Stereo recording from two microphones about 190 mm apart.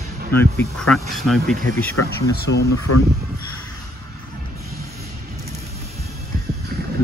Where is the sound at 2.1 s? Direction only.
65° left (ahead or behind).